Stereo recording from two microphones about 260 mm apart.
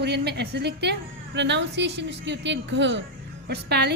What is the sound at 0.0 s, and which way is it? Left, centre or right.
A woman's voice, right.